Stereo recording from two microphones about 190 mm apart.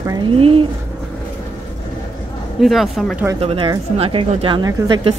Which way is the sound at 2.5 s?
Centre (ahead or behind).